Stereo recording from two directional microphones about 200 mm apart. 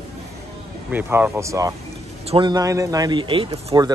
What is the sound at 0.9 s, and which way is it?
Speech, 10° right (ahead or behind).